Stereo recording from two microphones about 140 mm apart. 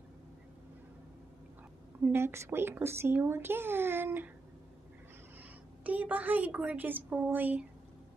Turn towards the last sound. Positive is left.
turn(degrees=-10)  # may be behind; listen again after turning